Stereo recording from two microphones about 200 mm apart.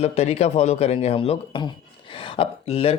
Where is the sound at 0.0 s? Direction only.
35° left (ahead or behind).